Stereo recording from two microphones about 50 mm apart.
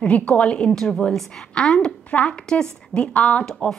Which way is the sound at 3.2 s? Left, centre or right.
Left.